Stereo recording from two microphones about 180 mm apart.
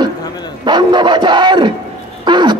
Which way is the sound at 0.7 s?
25° right (ahead or behind).